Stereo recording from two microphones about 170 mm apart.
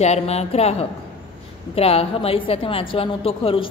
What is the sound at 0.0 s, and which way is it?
A woman's voice, 40° left (ahead or behind).